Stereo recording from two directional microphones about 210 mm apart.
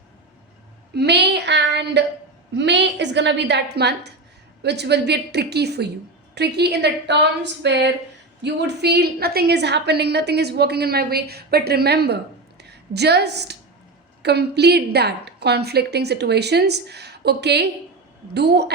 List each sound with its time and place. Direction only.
0.9 s child singing: 55° right (ahead or behind)
2.6 s a woman's voice: 55° right (ahead or behind)